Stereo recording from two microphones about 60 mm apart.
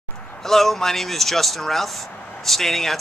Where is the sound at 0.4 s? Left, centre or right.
Centre.